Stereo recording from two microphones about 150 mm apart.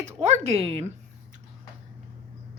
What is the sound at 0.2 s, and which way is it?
Speech, 45° right (ahead or behind).